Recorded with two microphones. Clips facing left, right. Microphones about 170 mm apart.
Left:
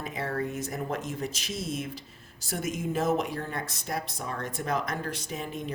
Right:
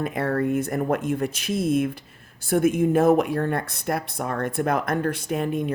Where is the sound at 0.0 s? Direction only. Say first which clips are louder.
Right 8 dB; 55° right (ahead or behind).